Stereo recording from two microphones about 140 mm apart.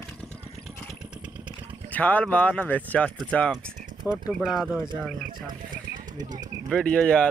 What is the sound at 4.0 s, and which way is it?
Speech, 5° right (ahead or behind).